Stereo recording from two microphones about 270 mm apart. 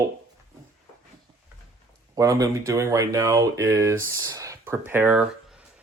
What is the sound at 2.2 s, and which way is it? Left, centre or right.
Speech, centre.